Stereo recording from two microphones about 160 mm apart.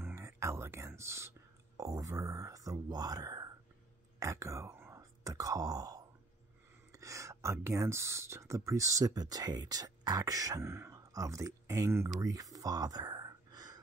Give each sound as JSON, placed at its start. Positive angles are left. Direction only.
{"t": 0.0, "sound": "whispering", "side_deg": -15}
{"t": 1.8, "sound": "speech", "side_deg": -20}
{"t": 12.2, "sound": "a sound", "side_deg": -20}